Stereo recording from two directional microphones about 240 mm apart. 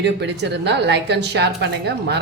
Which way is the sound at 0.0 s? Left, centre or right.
Right.